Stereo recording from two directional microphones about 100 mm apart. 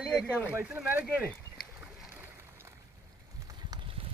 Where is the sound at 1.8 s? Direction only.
20° right (ahead or behind).